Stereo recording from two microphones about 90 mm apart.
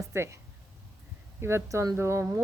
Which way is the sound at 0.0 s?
30° right (ahead or behind).